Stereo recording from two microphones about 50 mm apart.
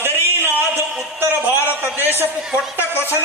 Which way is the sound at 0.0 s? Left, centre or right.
Right.